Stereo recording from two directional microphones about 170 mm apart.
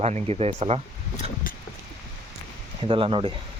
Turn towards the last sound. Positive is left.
turn(degrees=-30)  # may be behind; listen again after turning